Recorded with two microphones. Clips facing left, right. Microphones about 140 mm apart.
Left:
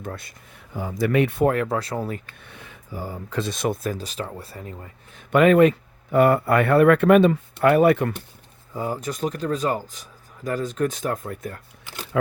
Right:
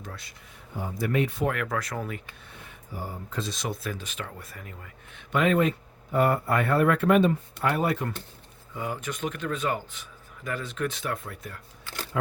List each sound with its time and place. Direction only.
0.0 s speech: 50° left (ahead or behind)
0.8 s speech: 90° left; by 1.5 s 65° left (ahead or behind)
1.5 s speech: 30° left (ahead or behind)
2.4 s speech: 80° left
3.2 s speech: 65° left (ahead or behind)
3.9 s speech: 35° left (ahead or behind)
5.3 s speech: 60° left (ahead or behind)
8.7 s speech: 35° left (ahead or behind)
12.1 s speech: 90° left